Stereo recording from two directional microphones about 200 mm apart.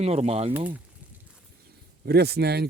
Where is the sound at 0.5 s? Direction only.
10° right (ahead or behind).